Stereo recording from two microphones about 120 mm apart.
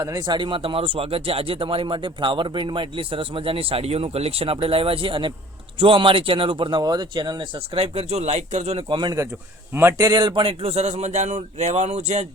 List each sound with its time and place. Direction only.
0.0 s speech: 35° right (ahead or behind)
7.8 s a man's voice: 60° right (ahead or behind)
8.9 s a man's voice: 40° right (ahead or behind); by 12.2 s 70° right (ahead or behind)